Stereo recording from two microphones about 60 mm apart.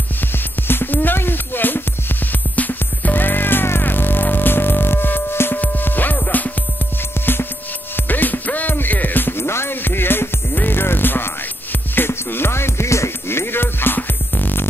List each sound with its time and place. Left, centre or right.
0.7 s music: left
7.9 s music: left